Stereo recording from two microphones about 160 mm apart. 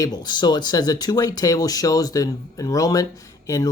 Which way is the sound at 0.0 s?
25° left (ahead or behind).